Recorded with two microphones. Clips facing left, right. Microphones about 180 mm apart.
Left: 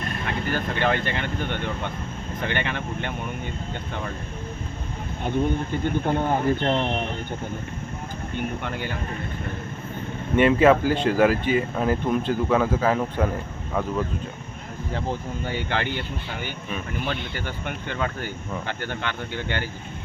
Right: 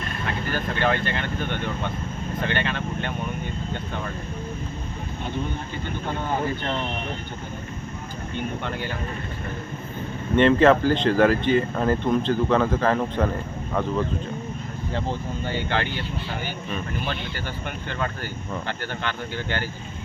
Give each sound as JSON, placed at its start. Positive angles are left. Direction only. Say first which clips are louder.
{"t": 0.5, "sound": "speech", "louder": "even", "side_deg": 15}
{"t": 5.8, "sound": "speech", "louder": "left 6 dB", "side_deg": 50}
{"t": 10.3, "sound": "speech", "louder": "even", "side_deg": 10}
{"t": 15.4, "sound": "speech", "louder": "right 1 dB", "side_deg": 15}